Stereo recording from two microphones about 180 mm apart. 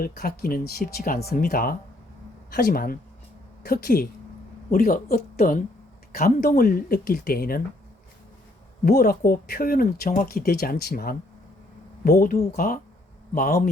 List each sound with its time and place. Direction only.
0.0 s speech: 55° left (ahead or behind)
8.8 s speech: 60° left (ahead or behind)